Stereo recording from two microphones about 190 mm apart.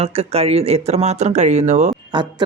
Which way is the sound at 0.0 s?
30° right (ahead or behind).